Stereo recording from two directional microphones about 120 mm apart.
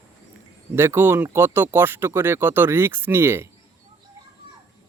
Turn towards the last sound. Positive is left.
turn(degrees=-20)  # may be behind; listen again after turning